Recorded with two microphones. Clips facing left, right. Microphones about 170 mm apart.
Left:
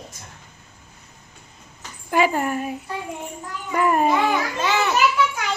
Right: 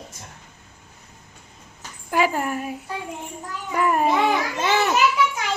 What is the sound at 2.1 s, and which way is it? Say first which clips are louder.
A woman's voice: left 2 dB; centre (ahead or behind).